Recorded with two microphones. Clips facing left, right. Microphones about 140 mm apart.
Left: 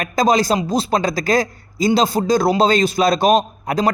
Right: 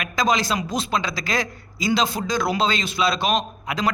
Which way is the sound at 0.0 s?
40° left (ahead or behind).